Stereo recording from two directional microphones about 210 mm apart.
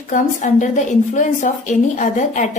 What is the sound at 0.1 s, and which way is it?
Speech, 40° left (ahead or behind).